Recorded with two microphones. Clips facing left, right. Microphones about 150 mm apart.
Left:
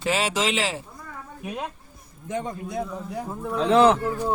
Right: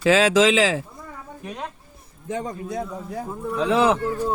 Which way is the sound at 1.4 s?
10° left (ahead or behind).